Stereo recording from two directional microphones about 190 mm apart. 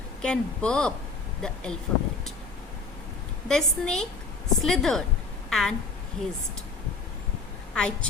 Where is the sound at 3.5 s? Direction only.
5° left (ahead or behind).